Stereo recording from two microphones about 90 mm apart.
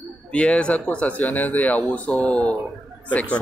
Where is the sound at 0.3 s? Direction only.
10° left (ahead or behind).